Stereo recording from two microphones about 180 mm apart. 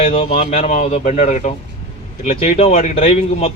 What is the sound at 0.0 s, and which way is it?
A man's voice, 35° left (ahead or behind).